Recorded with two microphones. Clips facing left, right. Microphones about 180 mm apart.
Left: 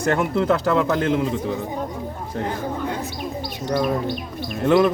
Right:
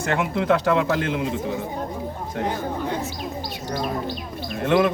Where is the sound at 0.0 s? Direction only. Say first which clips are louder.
Left 3 dB; 40° left (ahead or behind).